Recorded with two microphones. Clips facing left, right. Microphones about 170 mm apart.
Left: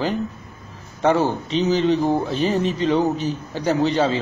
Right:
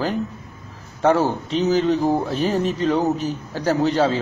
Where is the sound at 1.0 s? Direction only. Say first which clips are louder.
Right 1 dB; 5° right (ahead or behind).